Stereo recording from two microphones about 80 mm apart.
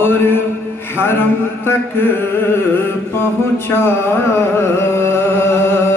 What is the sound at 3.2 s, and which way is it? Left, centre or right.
Mantra, left.